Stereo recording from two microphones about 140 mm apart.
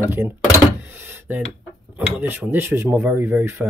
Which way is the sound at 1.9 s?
10° right (ahead or behind).